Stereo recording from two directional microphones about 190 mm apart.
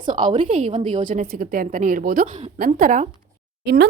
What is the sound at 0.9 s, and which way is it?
A woman's voice, 40° right (ahead or behind).